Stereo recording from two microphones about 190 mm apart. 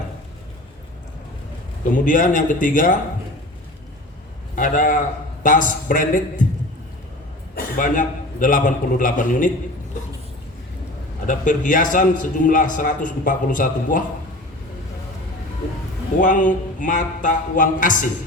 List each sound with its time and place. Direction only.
1.9 s a man's voice: 45° left (ahead or behind)
4.5 s a man's voice: 45° left (ahead or behind)
7.5 s a man's voice: 45° left (ahead or behind)
11.3 s a man's voice: 45° left (ahead or behind)
16.2 s a man's voice: 45° left (ahead or behind)